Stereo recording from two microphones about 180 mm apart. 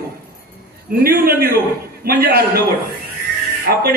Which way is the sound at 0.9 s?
60° right (ahead or behind).